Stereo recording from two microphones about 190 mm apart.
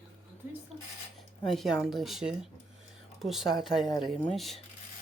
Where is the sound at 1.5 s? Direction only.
Centre (ahead or behind).